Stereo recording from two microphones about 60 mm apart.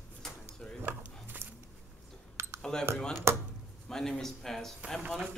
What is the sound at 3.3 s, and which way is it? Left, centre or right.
Speech, right.